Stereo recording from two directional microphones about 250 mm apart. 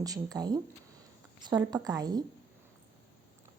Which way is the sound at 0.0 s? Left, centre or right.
Centre.